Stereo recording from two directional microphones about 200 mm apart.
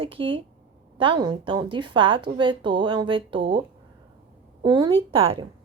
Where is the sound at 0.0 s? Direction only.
25° right (ahead or behind).